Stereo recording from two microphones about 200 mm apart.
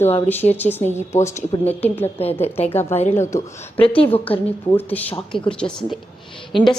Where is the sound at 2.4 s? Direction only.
30° left (ahead or behind).